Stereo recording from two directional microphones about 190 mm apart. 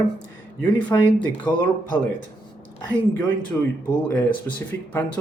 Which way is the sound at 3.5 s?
10° left (ahead or behind).